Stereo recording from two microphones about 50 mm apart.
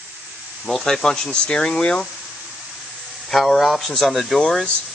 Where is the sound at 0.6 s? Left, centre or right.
Centre.